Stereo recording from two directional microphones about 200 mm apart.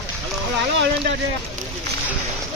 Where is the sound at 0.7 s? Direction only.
65° right (ahead or behind).